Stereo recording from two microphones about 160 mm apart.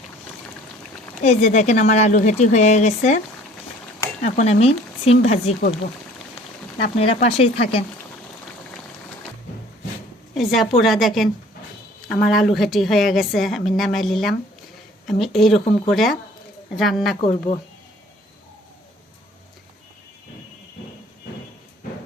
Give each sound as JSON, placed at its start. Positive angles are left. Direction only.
{"t": 1.2, "sound": "speech", "side_deg": 45}
{"t": 4.4, "sound": "speech", "side_deg": 40}
{"t": 7.1, "sound": "speech", "side_deg": 40}
{"t": 10.3, "sound": "a woman's voice", "side_deg": 0}
{"t": 17.2, "sound": "speech", "side_deg": 35}